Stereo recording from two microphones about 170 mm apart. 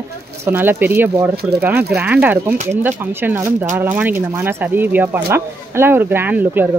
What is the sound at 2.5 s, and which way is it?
Speech, 45° right (ahead or behind).